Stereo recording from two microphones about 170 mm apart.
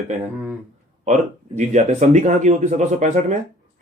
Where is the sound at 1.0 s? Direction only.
45° right (ahead or behind).